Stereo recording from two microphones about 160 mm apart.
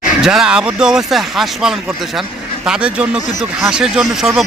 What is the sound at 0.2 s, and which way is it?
Speech, 5° right (ahead or behind).